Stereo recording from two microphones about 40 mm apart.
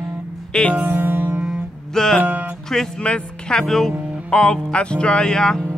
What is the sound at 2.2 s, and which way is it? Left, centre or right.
Music, right.